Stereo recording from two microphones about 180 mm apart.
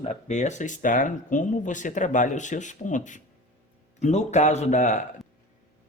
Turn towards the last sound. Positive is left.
turn(degrees=40)  # may be behind; listen again after turning